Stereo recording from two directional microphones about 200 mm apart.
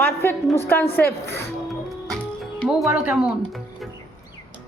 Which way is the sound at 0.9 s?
55° left (ahead or behind).